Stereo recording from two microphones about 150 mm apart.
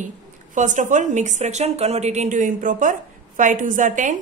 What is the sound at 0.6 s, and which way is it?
A woman's voice, 55° right (ahead or behind).